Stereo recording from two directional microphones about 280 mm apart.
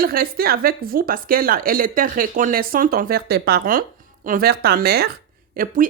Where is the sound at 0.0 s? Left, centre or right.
Right.